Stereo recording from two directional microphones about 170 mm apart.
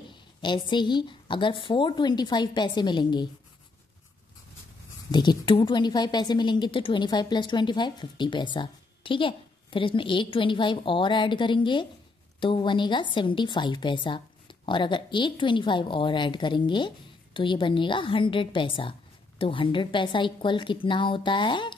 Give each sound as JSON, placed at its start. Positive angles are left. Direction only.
{"t": 0.1, "sound": "a woman's voice", "side_deg": 25}
{"t": 5.1, "sound": "a woman's voice", "side_deg": 25}